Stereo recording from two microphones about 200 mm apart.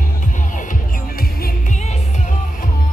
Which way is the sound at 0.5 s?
40° left (ahead or behind).